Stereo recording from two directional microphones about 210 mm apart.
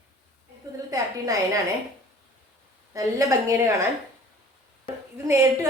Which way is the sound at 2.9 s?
15° right (ahead or behind).